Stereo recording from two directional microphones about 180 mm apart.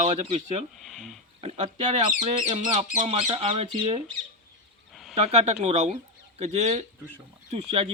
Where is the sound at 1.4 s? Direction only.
35° right (ahead or behind).